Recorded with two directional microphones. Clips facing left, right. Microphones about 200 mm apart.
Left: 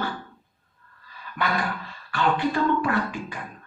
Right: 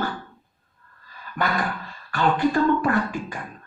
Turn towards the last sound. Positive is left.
turn(degrees=-45)  # may be behind; listen again after turning